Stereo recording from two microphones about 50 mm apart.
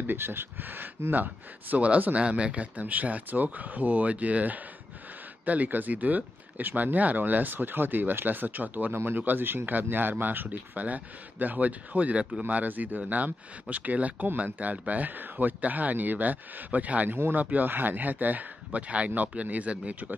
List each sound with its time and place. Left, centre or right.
0.0 s speech: right
8.9 s speech: right